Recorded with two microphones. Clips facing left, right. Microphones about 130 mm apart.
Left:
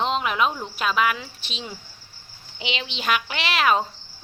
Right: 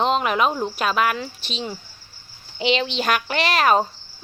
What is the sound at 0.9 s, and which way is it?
Speech, 45° right (ahead or behind).